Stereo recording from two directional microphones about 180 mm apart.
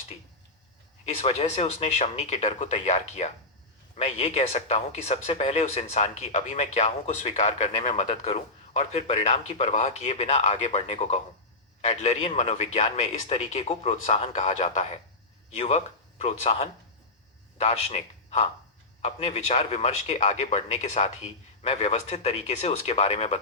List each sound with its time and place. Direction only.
1.0 s a man's voice: 35° left (ahead or behind)